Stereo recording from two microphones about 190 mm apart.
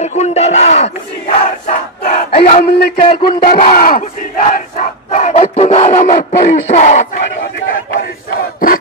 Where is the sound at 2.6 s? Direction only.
55° left (ahead or behind).